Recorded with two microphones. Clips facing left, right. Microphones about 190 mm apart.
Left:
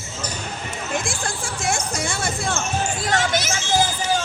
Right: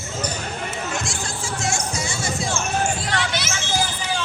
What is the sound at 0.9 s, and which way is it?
Music, 55° left (ahead or behind).